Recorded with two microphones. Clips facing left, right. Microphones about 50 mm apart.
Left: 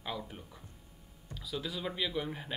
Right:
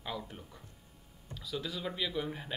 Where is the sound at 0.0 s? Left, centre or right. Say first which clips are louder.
Even; centre.